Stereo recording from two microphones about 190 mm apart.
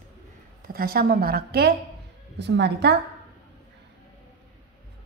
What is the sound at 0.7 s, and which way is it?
A woman's voice, 50° right (ahead or behind).